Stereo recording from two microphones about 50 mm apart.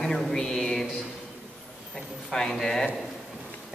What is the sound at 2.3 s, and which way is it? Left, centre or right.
Speech, centre.